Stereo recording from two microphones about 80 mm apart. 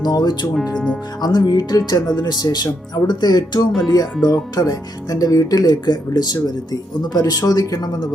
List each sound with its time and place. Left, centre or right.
0.0 s speech: left